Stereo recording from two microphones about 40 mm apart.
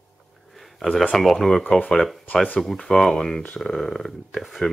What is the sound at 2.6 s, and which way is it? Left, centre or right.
Speech, centre.